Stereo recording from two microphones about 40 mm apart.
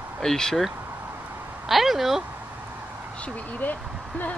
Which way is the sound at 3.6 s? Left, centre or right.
Left.